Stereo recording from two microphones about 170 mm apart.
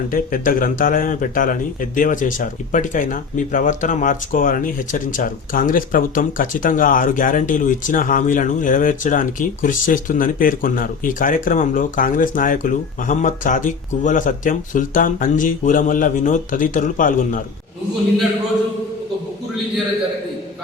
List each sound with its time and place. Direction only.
0.1 s speech: 55° left (ahead or behind)